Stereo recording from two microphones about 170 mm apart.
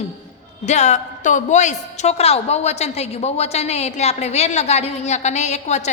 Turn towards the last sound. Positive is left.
turn(degrees=40)  # may be behind; listen again after turning